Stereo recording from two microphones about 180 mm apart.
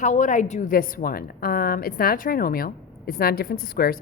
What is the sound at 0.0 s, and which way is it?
A woman's voice, 45° left (ahead or behind).